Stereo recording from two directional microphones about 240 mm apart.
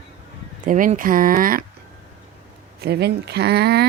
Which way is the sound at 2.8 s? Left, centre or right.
Right.